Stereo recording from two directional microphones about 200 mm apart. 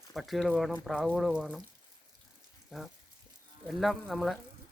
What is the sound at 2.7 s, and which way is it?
Speech, centre (ahead or behind).